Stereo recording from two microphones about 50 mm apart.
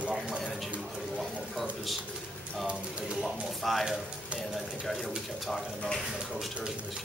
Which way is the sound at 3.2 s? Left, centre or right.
Centre.